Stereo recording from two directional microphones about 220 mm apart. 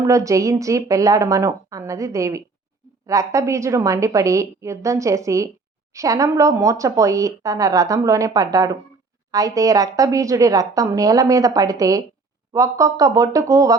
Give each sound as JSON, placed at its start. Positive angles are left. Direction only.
{"t": 0.0, "sound": "speech", "side_deg": -15}